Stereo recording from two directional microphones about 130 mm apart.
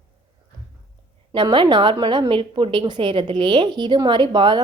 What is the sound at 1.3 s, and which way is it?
A woman's voice, 40° right (ahead or behind).